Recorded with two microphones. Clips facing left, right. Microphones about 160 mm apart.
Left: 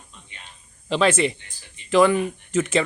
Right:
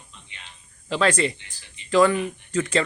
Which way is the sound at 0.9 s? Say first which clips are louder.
Left 2 dB; 20° left (ahead or behind).